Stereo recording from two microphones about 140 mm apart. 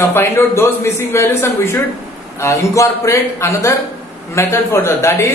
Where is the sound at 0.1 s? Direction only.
15° left (ahead or behind).